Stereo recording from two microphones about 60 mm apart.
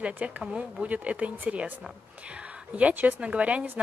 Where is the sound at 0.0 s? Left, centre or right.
Right.